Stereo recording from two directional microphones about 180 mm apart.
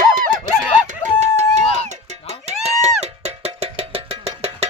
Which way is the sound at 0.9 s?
40° right (ahead or behind).